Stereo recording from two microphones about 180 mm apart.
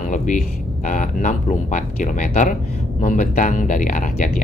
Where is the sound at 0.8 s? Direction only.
45° left (ahead or behind).